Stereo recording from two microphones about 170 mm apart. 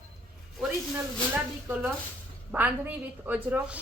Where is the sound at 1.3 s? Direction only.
10° right (ahead or behind).